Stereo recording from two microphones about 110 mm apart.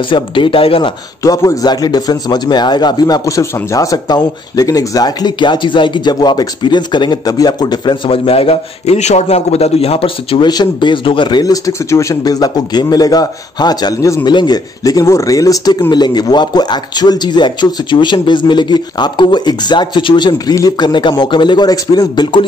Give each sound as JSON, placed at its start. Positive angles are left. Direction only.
{"t": 0.1, "sound": "a man's voice", "side_deg": 50}
{"t": 1.2, "sound": "a man's voice", "side_deg": 30}
{"t": 8.3, "sound": "a man's voice", "side_deg": 65}
{"t": 10.5, "sound": "a man's voice", "side_deg": 45}